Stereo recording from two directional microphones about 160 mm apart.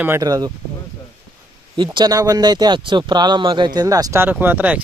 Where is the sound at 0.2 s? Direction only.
25° right (ahead or behind).